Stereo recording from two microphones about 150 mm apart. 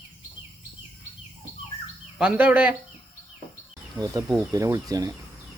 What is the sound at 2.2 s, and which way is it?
Speech, 10° right (ahead or behind).